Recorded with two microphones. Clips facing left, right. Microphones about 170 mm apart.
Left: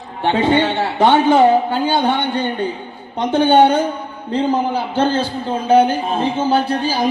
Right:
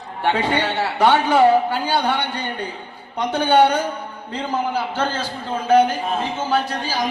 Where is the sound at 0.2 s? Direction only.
25° left (ahead or behind).